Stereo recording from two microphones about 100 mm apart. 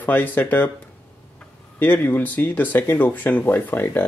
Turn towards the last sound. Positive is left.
turn(degrees=20)  # may be behind; listen again after turning